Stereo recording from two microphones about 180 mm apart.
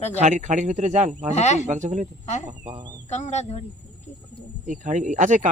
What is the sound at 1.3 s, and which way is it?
Speech, 40° left (ahead or behind).